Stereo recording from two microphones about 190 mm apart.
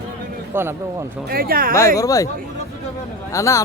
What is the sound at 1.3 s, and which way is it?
Speech, 50° right (ahead or behind).